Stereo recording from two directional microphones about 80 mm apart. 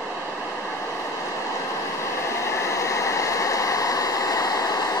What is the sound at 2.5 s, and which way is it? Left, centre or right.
Vehicle, left.